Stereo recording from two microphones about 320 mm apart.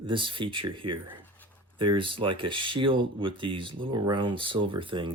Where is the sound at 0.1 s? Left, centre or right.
Centre.